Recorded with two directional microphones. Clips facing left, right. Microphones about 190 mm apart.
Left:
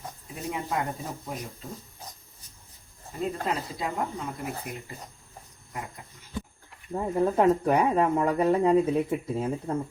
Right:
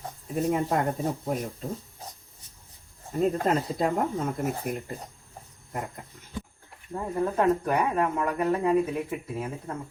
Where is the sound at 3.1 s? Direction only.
45° right (ahead or behind).